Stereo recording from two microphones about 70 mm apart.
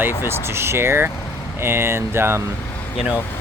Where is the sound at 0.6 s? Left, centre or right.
Right.